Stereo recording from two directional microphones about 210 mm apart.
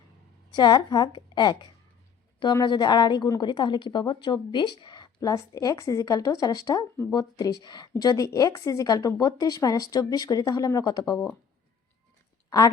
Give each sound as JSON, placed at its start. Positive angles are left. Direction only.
{"t": 0.5, "sound": "a woman's voice", "side_deg": 20}
{"t": 12.5, "sound": "speech", "side_deg": 15}